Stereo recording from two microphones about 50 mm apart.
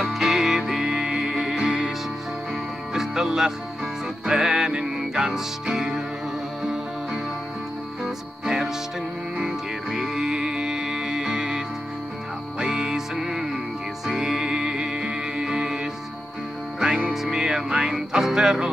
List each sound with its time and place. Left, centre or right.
0.0 s music: centre
2.9 s music: centre
8.0 s music: centre
9.8 s music: centre